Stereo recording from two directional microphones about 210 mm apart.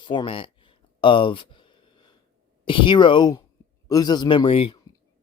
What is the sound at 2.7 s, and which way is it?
Speech, 25° left (ahead or behind).